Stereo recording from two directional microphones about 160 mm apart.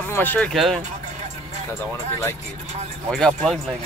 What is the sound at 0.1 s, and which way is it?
Speech, 10° left (ahead or behind).